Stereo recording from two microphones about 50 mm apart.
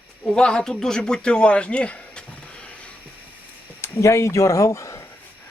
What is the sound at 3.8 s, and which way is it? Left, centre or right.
Speech, left.